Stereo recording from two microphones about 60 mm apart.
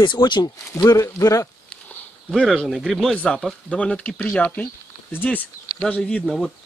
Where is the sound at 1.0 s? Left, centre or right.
Left.